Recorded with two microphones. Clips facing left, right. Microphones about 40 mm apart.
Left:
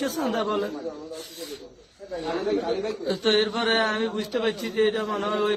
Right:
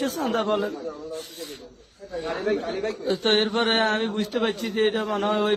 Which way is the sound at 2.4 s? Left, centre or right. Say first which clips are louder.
Even; right.